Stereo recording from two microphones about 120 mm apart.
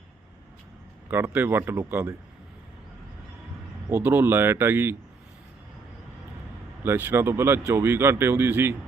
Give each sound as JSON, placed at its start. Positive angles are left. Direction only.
{"t": 1.1, "sound": "a man's voice", "side_deg": -20}
{"t": 4.0, "sound": "speech", "side_deg": -15}
{"t": 6.8, "sound": "a man's voice", "side_deg": -15}